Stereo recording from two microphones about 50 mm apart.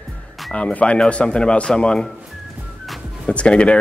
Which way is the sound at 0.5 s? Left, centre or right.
Left.